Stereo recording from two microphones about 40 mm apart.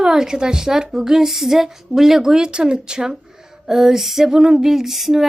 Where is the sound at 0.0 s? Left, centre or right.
Centre.